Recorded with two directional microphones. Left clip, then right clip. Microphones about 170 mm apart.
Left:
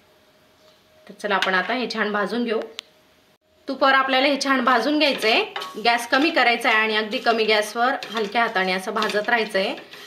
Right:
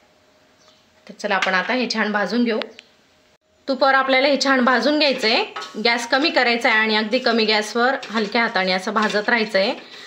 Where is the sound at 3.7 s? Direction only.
25° right (ahead or behind).